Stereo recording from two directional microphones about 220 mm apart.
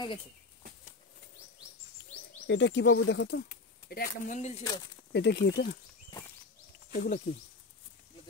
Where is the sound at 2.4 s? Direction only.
55° left (ahead or behind).